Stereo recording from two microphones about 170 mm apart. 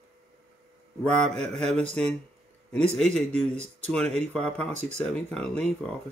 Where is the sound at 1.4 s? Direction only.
5° left (ahead or behind).